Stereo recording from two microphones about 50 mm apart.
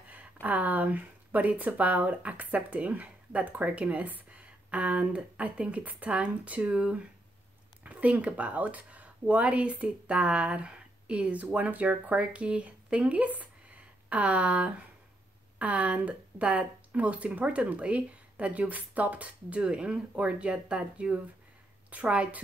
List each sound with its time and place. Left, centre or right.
0.1 s a woman's voice: right
10.7 s a sound: right
11.5 s a woman's voice: right